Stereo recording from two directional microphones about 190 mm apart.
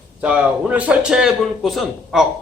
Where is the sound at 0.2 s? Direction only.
5° right (ahead or behind).